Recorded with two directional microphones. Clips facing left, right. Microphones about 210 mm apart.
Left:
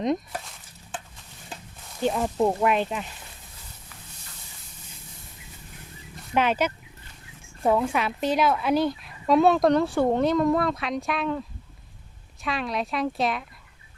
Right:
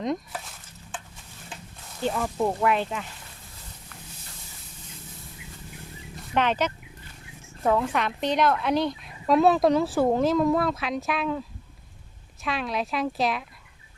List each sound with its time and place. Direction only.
2.0 s speech: 20° left (ahead or behind)
6.3 s a woman's voice: 10° left (ahead or behind)